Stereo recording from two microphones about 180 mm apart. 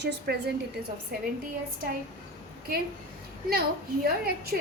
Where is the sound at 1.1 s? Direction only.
55° right (ahead or behind).